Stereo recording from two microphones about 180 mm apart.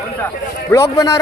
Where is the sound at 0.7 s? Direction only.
20° left (ahead or behind).